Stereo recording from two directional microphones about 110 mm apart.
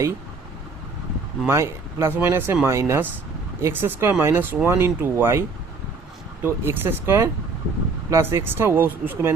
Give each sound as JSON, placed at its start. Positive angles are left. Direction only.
{"t": 1.5, "sound": "speech", "side_deg": -20}